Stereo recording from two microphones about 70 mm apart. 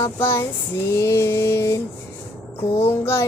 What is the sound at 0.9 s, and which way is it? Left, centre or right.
Mantra, left.